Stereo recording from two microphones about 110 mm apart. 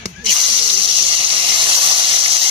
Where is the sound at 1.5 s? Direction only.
45° right (ahead or behind).